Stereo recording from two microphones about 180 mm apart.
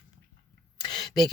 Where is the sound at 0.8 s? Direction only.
25° left (ahead or behind).